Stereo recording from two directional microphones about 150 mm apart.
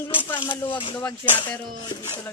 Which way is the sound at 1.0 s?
15° left (ahead or behind).